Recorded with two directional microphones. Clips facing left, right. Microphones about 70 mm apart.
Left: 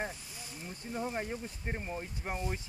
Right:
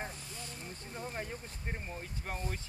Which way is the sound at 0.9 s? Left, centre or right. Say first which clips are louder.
Left 5 dB; centre.